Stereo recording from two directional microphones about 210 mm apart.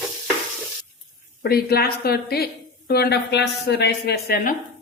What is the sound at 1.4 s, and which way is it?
A woman's voice, 45° left (ahead or behind).